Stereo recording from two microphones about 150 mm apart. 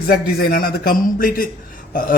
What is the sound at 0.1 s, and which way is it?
Speech, 90° left.